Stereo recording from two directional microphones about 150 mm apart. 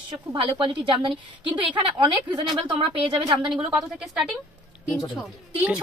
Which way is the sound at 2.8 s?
30° right (ahead or behind).